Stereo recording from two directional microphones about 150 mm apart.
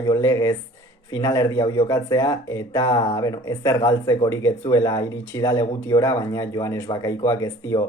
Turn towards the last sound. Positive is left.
turn(degrees=25)  # may be behind; listen again after turning